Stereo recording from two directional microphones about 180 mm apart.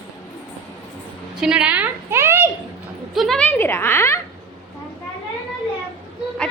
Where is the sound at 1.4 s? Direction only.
5° right (ahead or behind).